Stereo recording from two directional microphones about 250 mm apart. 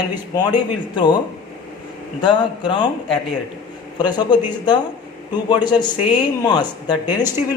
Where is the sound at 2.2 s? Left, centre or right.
Centre.